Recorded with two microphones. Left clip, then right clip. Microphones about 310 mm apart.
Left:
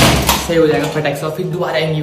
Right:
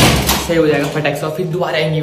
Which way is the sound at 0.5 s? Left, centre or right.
Centre.